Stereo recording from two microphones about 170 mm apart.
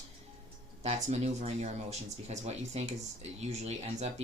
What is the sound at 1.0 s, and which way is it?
Speech, 40° right (ahead or behind).